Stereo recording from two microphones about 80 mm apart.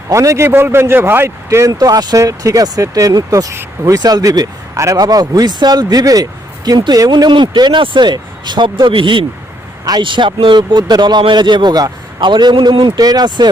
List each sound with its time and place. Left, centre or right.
0.1 s a man's voice: right
0.4 s a man's voice: right
2.1 s speech: right
4.9 s speech: right
9.8 s speech: right
13.0 s speech: right